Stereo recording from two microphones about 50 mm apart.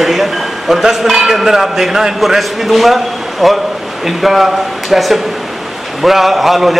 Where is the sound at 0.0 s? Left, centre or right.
Centre.